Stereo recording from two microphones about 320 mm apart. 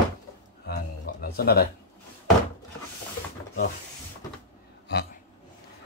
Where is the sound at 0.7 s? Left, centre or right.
Left.